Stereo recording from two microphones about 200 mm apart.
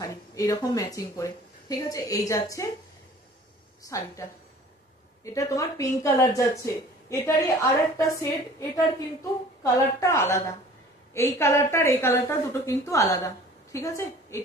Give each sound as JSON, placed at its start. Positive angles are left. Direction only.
{"t": 0.0, "sound": "speech", "side_deg": 15}
{"t": 3.9, "sound": "speech", "side_deg": 15}
{"t": 5.2, "sound": "speech", "side_deg": 15}